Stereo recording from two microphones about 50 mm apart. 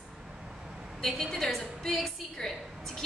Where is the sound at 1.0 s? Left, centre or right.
Centre.